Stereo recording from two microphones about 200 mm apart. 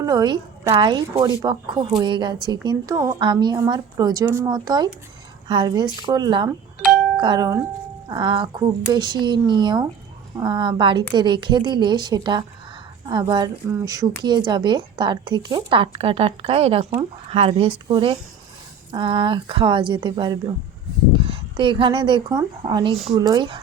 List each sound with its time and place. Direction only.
0.0 s a woman's voice: 20° right (ahead or behind)